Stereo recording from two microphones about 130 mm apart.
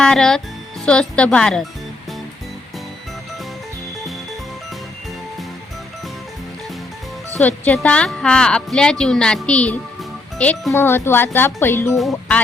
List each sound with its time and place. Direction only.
0.0 s a woman's voice: 5° left (ahead or behind)
7.3 s a woman's voice: 10° left (ahead or behind)
10.0 s music: 10° left (ahead or behind)
10.7 s a woman's voice: 15° left (ahead or behind)